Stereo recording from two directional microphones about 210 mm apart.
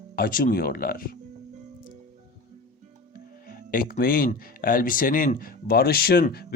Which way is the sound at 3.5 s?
45° left (ahead or behind).